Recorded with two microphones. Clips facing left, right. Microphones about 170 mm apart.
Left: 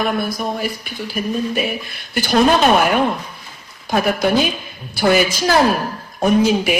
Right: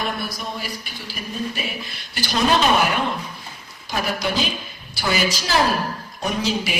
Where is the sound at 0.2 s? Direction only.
50° left (ahead or behind).